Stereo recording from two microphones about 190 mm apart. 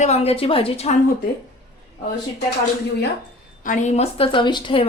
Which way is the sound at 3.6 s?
40° left (ahead or behind).